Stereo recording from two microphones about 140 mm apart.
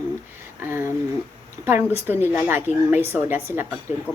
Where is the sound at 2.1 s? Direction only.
15° right (ahead or behind).